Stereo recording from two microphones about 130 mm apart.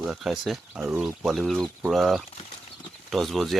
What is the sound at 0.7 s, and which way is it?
Speech, 15° right (ahead or behind).